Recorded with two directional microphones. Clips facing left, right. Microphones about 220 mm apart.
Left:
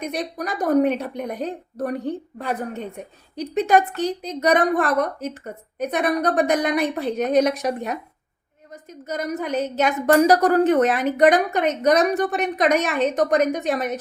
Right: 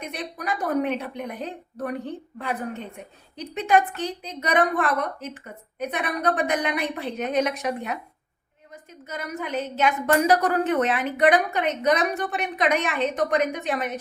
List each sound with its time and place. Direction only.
0.0 s a woman's voice: 40° left (ahead or behind)